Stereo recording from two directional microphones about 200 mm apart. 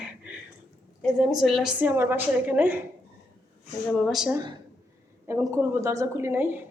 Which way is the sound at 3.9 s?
Centre (ahead or behind).